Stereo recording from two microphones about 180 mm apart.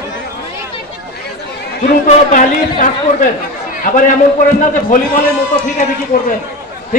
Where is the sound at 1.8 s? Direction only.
50° left (ahead or behind).